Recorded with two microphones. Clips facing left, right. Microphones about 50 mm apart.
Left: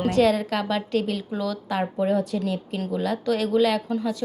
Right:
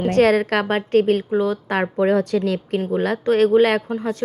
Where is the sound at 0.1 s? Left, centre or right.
Right.